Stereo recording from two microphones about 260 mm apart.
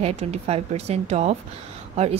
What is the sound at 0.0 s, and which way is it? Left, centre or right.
A woman's voice, right.